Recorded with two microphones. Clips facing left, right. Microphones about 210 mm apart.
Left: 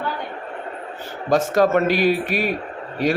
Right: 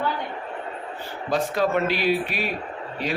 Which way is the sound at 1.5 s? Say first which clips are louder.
Left 6 dB; 45° left (ahead or behind).